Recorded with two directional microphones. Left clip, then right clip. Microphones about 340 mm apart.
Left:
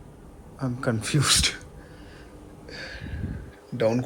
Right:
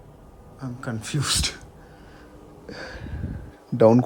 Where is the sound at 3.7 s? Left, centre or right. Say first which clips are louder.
Right 8 dB; centre.